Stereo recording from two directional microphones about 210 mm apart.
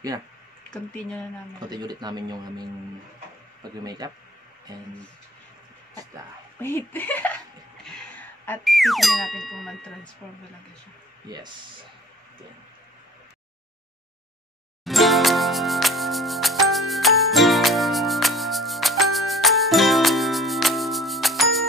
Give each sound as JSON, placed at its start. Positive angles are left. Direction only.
{"t": 1.7, "sound": "speech", "side_deg": -20}
{"t": 3.8, "sound": "speech", "side_deg": -20}
{"t": 6.6, "sound": "speech", "side_deg": 10}
{"t": 11.2, "sound": "speech", "side_deg": -20}
{"t": 14.9, "sound": "music", "side_deg": 0}